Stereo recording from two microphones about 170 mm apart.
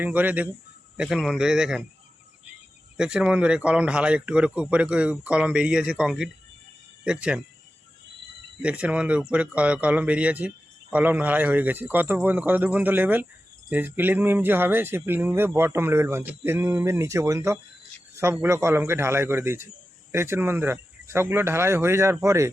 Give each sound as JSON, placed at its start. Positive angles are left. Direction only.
{"t": 0.0, "sound": "a man's voice", "side_deg": -10}
{"t": 3.0, "sound": "speech", "side_deg": -5}
{"t": 8.6, "sound": "speech", "side_deg": -5}